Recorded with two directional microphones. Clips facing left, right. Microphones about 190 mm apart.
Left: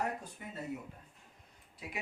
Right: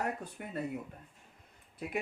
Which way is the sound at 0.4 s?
65° right (ahead or behind).